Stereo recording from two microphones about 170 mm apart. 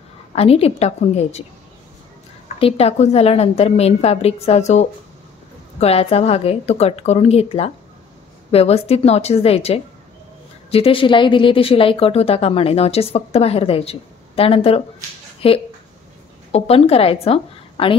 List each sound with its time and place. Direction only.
0.3 s a woman's voice: 35° left (ahead or behind)
2.6 s a woman's voice: 35° left (ahead or behind)